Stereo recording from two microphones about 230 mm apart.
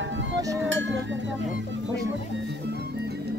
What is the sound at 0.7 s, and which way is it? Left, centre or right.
Music, right.